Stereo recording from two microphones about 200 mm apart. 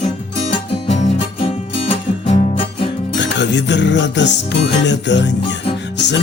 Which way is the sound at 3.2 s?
60° left (ahead or behind).